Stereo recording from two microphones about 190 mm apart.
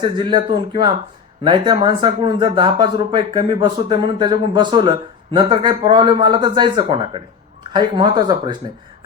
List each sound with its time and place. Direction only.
0.0 s speech: 25° right (ahead or behind)